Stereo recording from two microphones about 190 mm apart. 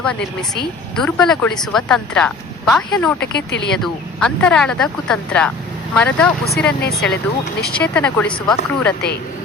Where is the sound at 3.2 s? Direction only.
60° left (ahead or behind).